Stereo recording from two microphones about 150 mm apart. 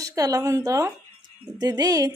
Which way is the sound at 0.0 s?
20° right (ahead or behind).